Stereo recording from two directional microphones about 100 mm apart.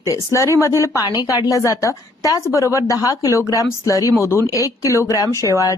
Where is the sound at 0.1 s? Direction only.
30° left (ahead or behind).